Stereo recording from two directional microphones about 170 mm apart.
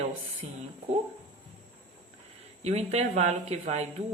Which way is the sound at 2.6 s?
40° right (ahead or behind).